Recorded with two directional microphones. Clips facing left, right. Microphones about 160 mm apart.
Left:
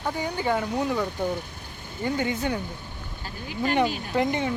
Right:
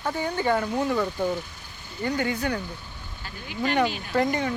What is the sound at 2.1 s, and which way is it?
Speech, 20° left (ahead or behind).